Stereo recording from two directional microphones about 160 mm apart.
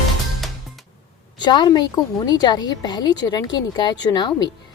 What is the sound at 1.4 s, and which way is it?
A woman's voice, 25° left (ahead or behind).